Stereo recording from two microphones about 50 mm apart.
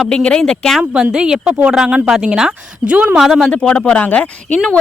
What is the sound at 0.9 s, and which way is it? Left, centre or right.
Speech, centre.